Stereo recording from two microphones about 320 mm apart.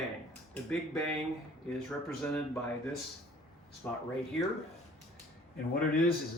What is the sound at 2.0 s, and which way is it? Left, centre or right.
Speech, centre.